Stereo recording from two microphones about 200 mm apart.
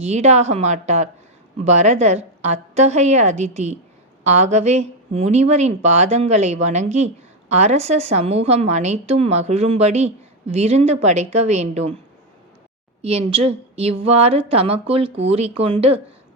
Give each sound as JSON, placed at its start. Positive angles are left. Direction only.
{"t": 0.0, "sound": "speech", "side_deg": -35}
{"t": 13.0, "sound": "a woman's voice", "side_deg": -30}